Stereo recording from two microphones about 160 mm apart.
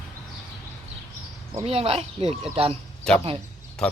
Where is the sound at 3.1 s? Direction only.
5° left (ahead or behind).